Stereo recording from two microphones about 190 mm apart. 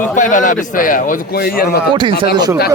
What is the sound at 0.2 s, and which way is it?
Speech, 40° left (ahead or behind).